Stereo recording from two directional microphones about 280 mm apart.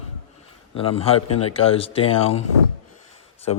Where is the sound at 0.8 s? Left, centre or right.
Centre.